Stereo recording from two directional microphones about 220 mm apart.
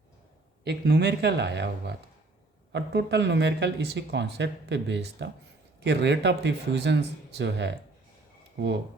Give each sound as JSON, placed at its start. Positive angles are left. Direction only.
{"t": 0.6, "sound": "speech", "side_deg": -50}